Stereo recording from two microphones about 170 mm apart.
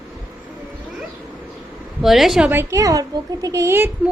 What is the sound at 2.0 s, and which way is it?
A woman's voice, centre (ahead or behind).